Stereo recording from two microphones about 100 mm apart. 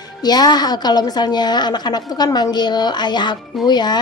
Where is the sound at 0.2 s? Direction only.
45° left (ahead or behind).